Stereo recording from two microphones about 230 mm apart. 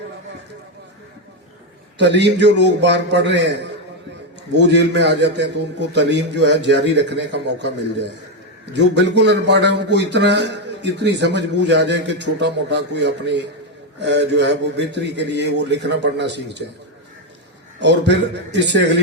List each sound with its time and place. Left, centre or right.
2.0 s a man's voice: right
17.7 s a man's voice: right